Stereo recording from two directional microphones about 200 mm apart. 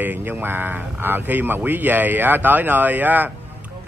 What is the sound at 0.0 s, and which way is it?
A man's voice, 10° right (ahead or behind).